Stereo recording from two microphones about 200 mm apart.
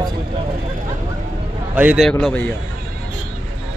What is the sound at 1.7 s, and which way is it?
Speech, 5° right (ahead or behind).